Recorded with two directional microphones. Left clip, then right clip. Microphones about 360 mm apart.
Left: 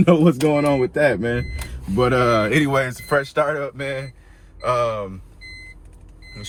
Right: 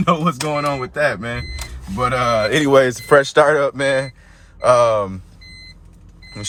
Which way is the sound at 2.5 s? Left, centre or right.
Centre.